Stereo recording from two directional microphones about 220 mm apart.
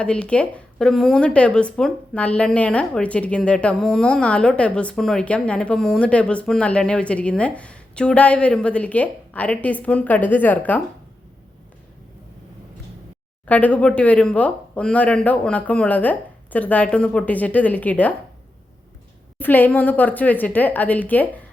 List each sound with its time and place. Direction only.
0.0 s speech: 5° left (ahead or behind)
13.5 s speech: 5° left (ahead or behind)
19.4 s speech: 10° left (ahead or behind)